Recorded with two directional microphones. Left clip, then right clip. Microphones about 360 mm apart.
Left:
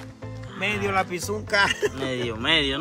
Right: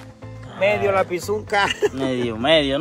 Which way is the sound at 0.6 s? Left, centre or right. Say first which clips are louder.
Right 6 dB; centre.